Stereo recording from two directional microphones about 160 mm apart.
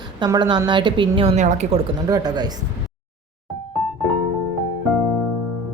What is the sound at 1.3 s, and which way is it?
Speech, 50° right (ahead or behind).